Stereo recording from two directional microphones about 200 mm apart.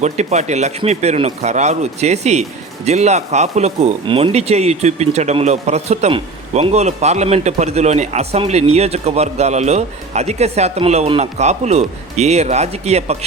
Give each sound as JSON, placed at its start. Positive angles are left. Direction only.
{"t": 0.0, "sound": "speech", "side_deg": -35}